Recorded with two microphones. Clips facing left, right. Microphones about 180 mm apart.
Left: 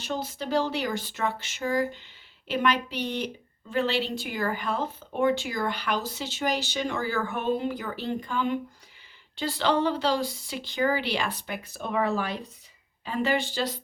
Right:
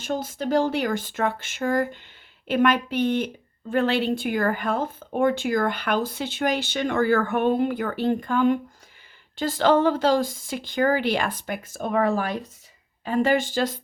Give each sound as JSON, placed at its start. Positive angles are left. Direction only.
{"t": 0.0, "sound": "speech", "side_deg": -50}